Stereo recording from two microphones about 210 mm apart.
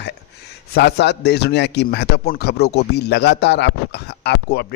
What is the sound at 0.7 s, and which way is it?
A man's voice, 55° left (ahead or behind).